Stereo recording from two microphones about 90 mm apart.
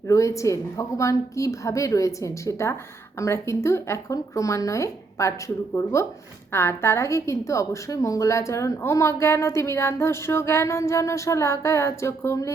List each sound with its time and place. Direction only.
0.1 s a woman's voice: 35° left (ahead or behind)